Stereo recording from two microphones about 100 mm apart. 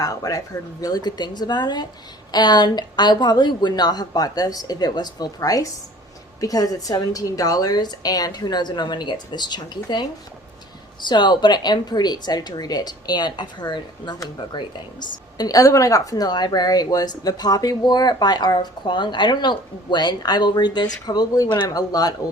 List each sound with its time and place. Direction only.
0.0 s a woman's voice: 35° left (ahead or behind)